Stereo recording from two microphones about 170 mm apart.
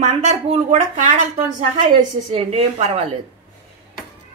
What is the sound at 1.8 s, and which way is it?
A woman's voice, 35° right (ahead or behind).